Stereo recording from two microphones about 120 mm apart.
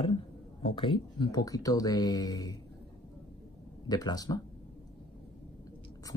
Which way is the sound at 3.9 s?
35° left (ahead or behind).